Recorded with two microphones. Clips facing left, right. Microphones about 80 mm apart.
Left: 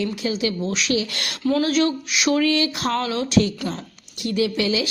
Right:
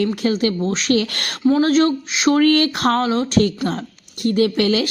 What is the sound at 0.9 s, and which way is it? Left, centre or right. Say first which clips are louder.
Speech: right 4 dB; right.